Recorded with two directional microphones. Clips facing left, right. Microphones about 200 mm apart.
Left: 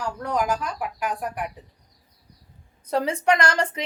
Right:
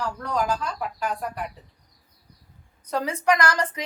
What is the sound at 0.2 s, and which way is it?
Speech, 15° left (ahead or behind).